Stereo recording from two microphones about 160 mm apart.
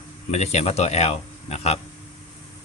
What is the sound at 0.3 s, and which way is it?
Speech, 45° left (ahead or behind).